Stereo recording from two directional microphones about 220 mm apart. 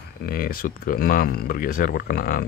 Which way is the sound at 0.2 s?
40° left (ahead or behind).